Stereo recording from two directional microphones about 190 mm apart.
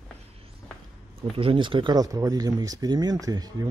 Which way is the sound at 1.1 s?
30° right (ahead or behind).